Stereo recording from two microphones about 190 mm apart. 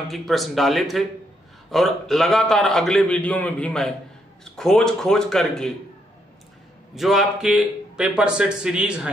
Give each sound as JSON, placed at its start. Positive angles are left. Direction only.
{"t": 0.1, "sound": "a man's voice", "side_deg": 0}
{"t": 7.0, "sound": "a man's voice", "side_deg": 0}